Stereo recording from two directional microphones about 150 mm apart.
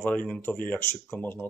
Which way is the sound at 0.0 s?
10° left (ahead or behind).